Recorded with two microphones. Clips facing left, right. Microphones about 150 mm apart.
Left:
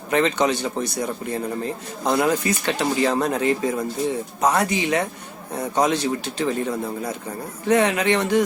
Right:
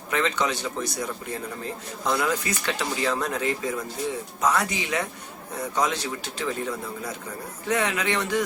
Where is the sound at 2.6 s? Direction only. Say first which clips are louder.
Left 6 dB; 55° left (ahead or behind).